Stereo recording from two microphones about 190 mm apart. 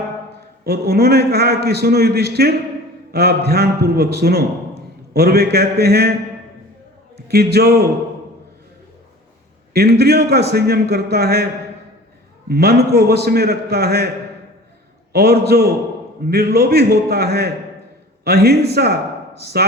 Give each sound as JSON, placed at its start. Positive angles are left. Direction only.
{"t": 0.6, "sound": "a man's voice", "side_deg": -55}
{"t": 7.3, "sound": "a man's voice", "side_deg": -55}
{"t": 9.7, "sound": "a man's voice", "side_deg": -55}
{"t": 12.5, "sound": "a man's voice", "side_deg": -55}
{"t": 15.1, "sound": "a man's voice", "side_deg": -55}